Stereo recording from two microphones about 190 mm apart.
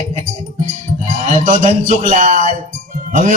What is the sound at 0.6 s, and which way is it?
A man's voice, 40° right (ahead or behind).